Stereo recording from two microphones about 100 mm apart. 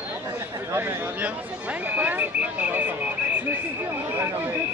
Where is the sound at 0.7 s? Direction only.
20° right (ahead or behind).